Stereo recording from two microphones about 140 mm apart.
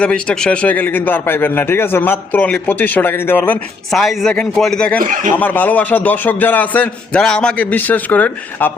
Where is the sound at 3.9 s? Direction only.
Centre (ahead or behind).